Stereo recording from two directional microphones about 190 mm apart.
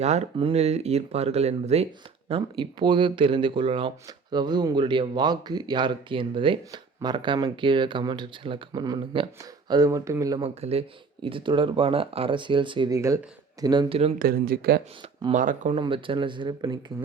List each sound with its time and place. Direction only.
0.0 s speech: 35° right (ahead or behind); by 10.5 s 20° right (ahead or behind)
10.5 s speech: 30° right (ahead or behind)
14.2 s speech: 50° right (ahead or behind)
15.3 s speech: 40° right (ahead or behind)
15.8 s speech: 25° right (ahead or behind)